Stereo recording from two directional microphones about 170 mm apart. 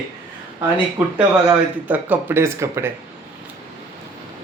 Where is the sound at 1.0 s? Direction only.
10° right (ahead or behind).